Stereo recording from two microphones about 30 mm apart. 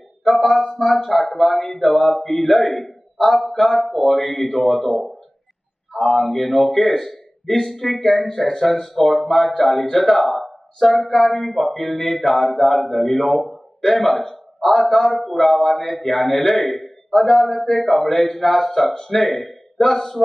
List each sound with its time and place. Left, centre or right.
0.2 s a man's voice: centre